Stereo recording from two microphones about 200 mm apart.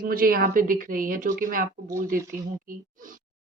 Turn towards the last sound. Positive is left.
turn(degrees=-40)  # may be behind; listen again after turning